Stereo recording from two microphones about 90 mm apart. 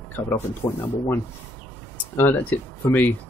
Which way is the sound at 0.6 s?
40° left (ahead or behind).